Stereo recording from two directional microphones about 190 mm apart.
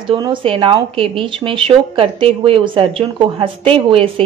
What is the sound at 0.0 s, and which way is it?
Speech, 25° right (ahead or behind).